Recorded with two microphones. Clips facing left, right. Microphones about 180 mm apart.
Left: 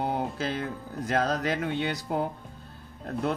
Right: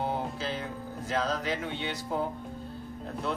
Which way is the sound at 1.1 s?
45° left (ahead or behind).